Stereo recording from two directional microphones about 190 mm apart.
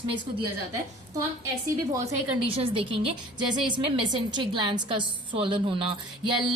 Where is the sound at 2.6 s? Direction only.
30° right (ahead or behind).